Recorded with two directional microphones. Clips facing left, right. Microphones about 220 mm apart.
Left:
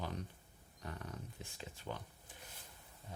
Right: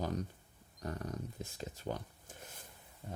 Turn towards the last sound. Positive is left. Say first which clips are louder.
# right 6 dB
turn(degrees=-50)  # may be behind; listen again after turning